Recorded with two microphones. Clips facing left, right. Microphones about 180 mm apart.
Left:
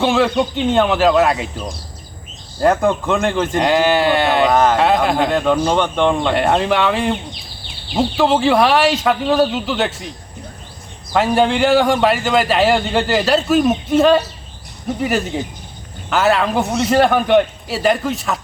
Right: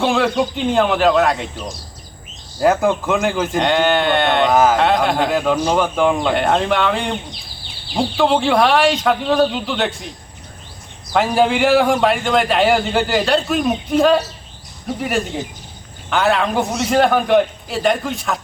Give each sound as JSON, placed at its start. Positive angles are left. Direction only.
{"t": 0.0, "sound": "speech", "side_deg": 0}
{"t": 11.1, "sound": "speech", "side_deg": 0}
{"t": 16.0, "sound": "speech", "side_deg": 0}